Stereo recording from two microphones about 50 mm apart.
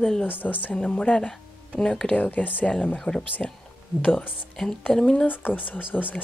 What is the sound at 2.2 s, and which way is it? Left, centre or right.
Speech, left.